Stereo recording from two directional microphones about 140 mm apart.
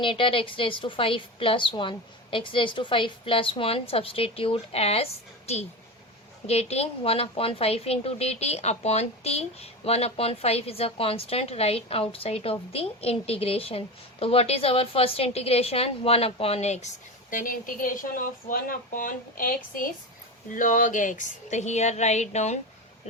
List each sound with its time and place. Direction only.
0.0 s a woman's voice: 40° left (ahead or behind)
6.5 s speech: 50° left (ahead or behind)
17.3 s speech: 75° left (ahead or behind)
20.5 s a woman's voice: 70° left (ahead or behind); by 22.5 s 55° left (ahead or behind)